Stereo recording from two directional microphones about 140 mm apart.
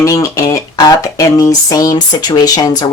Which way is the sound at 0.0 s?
25° left (ahead or behind).